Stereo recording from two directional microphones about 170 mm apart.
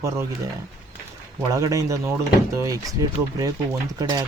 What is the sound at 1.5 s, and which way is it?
Speech, 20° right (ahead or behind).